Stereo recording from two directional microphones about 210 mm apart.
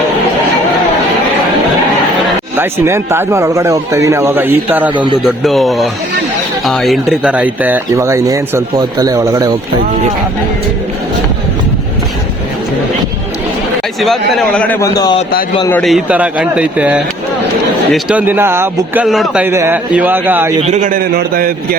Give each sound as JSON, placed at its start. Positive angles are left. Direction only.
{"t": 2.6, "sound": "speech", "side_deg": -10}
{"t": 14.0, "sound": "a man's voice", "side_deg": 0}
{"t": 15.7, "sound": "speech", "side_deg": 0}
{"t": 20.6, "sound": "a man's voice", "side_deg": -35}